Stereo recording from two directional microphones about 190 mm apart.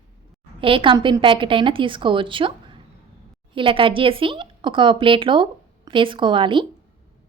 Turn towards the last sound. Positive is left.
turn(degrees=-25)  # may be behind; listen again after turning